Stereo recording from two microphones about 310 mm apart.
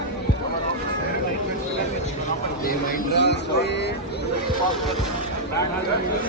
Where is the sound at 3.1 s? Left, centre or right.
Left.